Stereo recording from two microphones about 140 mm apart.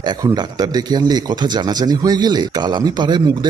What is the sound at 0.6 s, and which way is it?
Speech, 30° right (ahead or behind).